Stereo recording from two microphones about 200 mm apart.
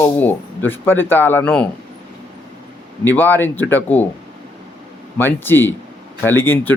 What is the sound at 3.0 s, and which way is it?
A man's voice, 10° left (ahead or behind).